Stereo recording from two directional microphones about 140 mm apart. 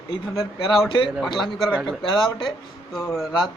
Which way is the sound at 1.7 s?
Centre (ahead or behind).